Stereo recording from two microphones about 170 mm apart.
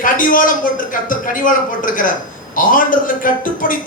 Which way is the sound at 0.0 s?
50° left (ahead or behind).